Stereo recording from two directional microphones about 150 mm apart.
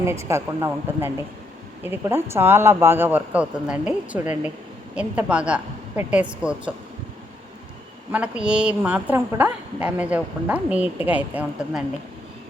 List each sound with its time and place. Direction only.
0.0 s a woman's voice: 20° right (ahead or behind)
8.1 s a woman's voice: 5° right (ahead or behind)